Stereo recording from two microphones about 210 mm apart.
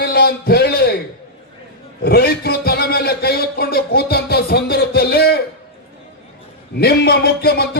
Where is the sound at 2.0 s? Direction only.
50° left (ahead or behind).